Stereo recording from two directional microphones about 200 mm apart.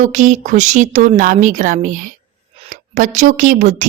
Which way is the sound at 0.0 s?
40° right (ahead or behind).